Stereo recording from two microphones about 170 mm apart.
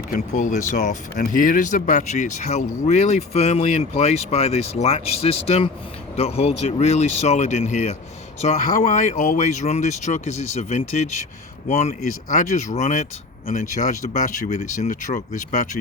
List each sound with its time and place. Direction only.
0.1 s speech: 50° left (ahead or behind)